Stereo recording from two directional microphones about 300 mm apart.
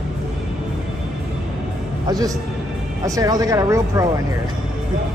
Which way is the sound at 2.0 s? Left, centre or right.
Centre.